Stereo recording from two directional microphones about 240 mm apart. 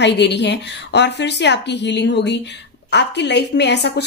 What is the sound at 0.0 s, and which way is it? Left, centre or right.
A woman's voice, left.